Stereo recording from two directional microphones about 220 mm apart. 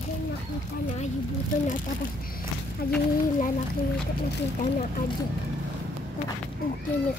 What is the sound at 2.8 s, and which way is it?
Speech, 45° left (ahead or behind).